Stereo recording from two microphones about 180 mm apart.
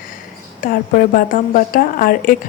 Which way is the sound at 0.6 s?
50° left (ahead or behind).